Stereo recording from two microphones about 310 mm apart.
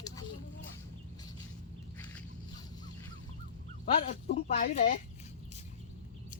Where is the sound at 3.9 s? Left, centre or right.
Left.